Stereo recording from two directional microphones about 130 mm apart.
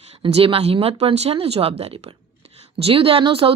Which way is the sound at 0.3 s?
50° right (ahead or behind).